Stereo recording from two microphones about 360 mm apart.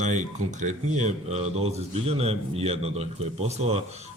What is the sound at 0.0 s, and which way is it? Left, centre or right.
Speech, centre.